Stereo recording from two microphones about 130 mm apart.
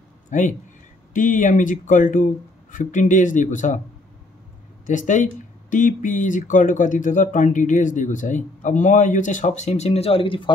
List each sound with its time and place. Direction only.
0.3 s a man's voice: 70° left (ahead or behind)
4.8 s speech: 75° left (ahead or behind); by 10.5 s 40° left (ahead or behind)